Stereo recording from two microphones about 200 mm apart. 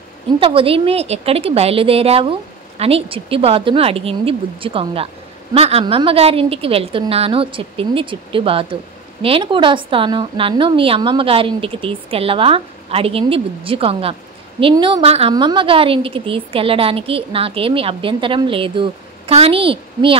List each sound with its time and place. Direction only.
0.4 s a woman's voice: 25° right (ahead or behind)